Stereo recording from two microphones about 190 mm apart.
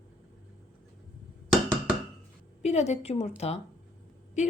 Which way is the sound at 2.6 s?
35° left (ahead or behind).